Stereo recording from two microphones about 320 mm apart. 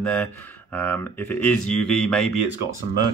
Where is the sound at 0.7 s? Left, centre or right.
Centre.